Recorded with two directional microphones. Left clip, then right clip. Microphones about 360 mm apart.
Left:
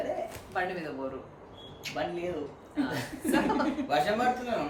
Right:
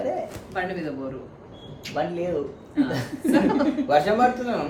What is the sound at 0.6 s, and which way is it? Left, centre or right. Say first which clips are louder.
Speech: right 3 dB; centre.